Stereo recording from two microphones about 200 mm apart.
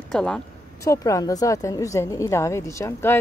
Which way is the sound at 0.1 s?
5° left (ahead or behind).